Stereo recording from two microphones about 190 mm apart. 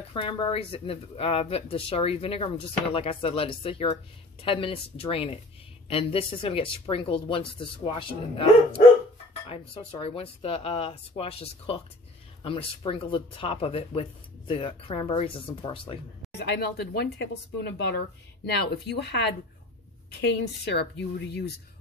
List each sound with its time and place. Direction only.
0.1 s speech: 25° left (ahead or behind)
16.3 s speech: 60° left (ahead or behind)